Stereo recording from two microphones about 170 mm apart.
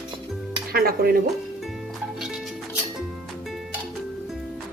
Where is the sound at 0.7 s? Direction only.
60° right (ahead or behind).